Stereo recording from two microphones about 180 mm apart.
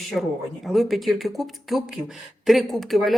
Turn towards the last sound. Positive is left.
turn(degrees=0)  # may be behind; listen again after turning